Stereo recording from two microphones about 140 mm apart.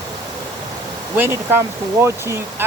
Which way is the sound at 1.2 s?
15° right (ahead or behind).